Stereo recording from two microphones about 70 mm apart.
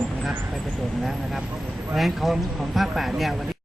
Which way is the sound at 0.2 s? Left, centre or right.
Centre.